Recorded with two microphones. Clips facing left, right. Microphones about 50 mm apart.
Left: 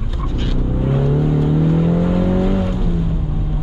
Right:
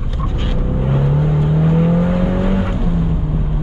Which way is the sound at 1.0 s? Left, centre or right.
Centre.